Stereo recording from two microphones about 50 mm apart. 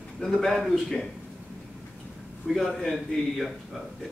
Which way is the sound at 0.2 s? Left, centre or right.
Centre.